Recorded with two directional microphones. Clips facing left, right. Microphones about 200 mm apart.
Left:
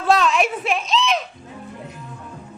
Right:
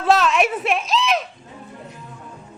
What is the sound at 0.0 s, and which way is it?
Speech, centre (ahead or behind).